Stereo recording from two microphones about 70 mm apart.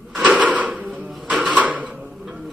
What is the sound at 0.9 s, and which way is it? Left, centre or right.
Printer, centre.